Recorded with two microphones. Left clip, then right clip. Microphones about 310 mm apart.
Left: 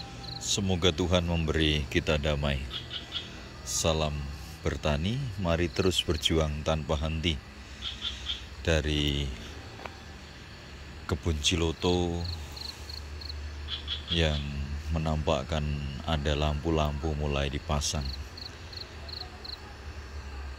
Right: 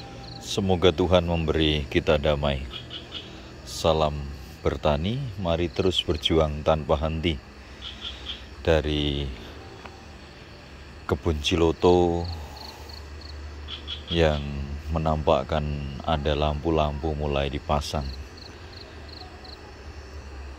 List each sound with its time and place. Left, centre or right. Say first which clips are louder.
0.3 s speech: right 5 dB; centre
3.6 s a sound: right 6 dB; centre
4.6 s speech: right 7 dB; centre
7.8 s vehicle: left 1 dB; right
8.6 s speech: right 5 dB; centre
11.1 s speech: right 4 dB; centre
13.7 s a sound: even; right
14.1 s speech: right 7 dB; centre